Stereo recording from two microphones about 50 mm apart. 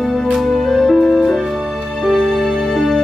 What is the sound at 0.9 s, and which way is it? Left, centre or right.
Music, centre.